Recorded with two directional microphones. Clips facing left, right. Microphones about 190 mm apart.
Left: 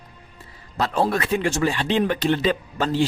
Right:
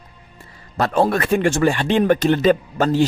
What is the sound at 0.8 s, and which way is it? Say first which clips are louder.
Speech: right 4 dB; 55° right (ahead or behind).